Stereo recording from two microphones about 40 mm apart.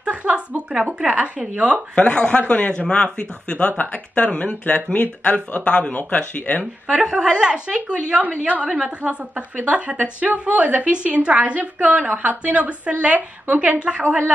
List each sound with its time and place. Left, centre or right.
0.0 s a sound: right
1.5 s a woman's voice: right
2.0 s speech: left
3.7 s speech: left
4.1 s speech: left
6.3 s speech: left
7.0 s a woman's voice: centre
8.2 s a woman's voice: right
8.6 s a woman's voice: right